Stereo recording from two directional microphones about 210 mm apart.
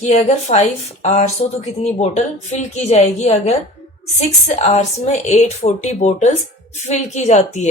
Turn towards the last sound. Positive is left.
turn(degrees=35)  # may be behind; listen again after turning